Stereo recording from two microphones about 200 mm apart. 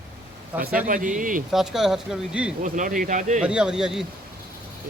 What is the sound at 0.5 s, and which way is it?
Speech, 10° right (ahead or behind).